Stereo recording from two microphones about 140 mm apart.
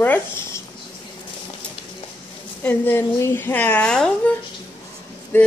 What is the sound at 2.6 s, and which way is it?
Speech, 15° left (ahead or behind).